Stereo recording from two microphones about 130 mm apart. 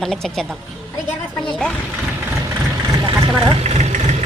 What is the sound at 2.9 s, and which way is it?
Speech, 40° right (ahead or behind).